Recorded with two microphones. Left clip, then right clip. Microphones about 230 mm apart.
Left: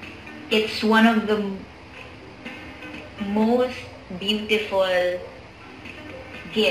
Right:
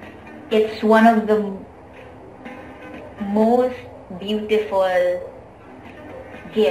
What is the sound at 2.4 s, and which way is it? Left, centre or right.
Music, centre.